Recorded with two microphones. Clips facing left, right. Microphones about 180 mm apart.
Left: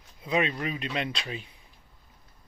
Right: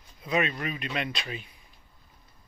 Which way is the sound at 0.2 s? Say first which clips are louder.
Left 1 dB; 25° left (ahead or behind).